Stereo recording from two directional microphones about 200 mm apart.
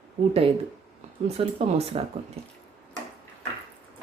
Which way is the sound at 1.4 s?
30° right (ahead or behind).